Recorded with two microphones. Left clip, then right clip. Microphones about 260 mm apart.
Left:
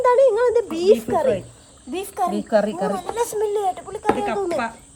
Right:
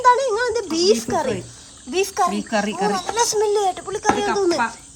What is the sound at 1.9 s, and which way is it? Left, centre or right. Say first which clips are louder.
Speech: right 4 dB; right.